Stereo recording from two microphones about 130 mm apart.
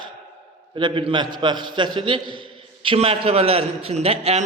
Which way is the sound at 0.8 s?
40° right (ahead or behind).